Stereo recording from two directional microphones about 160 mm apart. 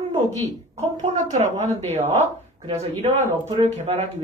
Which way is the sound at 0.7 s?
45° right (ahead or behind).